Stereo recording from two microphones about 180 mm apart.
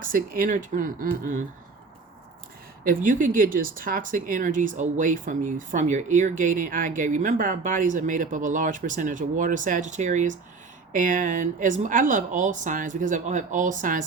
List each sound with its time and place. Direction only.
0.0 s speech: 50° right (ahead or behind)
2.8 s speech: 50° right (ahead or behind)